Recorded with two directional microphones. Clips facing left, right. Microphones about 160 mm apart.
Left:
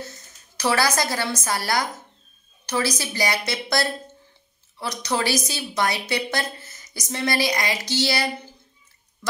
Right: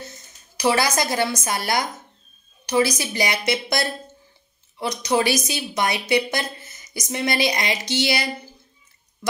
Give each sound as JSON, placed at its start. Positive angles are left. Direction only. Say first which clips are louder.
{"t": 0.6, "sound": "a woman's voice", "louder": "right 1 dB", "side_deg": -15}